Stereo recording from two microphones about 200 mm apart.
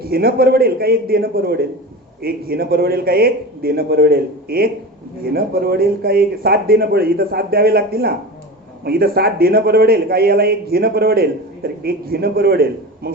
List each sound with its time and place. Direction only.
0.0 s a man's voice: 50° right (ahead or behind)